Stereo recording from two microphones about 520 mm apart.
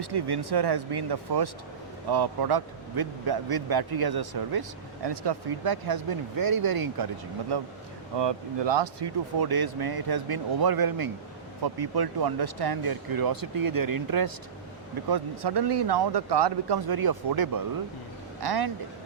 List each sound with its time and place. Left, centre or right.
0.0 s speech: right